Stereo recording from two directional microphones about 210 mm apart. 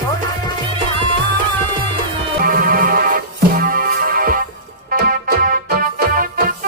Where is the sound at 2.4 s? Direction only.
45° right (ahead or behind).